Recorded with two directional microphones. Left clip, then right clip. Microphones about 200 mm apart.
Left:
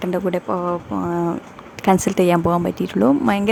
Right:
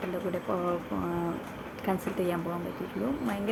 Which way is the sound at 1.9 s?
50° left (ahead or behind).